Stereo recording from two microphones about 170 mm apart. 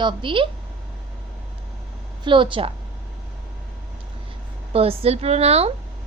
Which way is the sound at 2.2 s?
30° right (ahead or behind).